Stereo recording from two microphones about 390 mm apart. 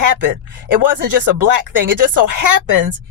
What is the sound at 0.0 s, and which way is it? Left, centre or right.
Speech, right.